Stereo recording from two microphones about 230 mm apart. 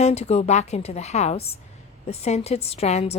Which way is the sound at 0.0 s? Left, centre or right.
Left.